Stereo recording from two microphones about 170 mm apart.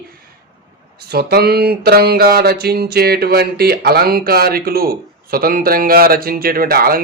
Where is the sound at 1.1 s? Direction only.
65° right (ahead or behind).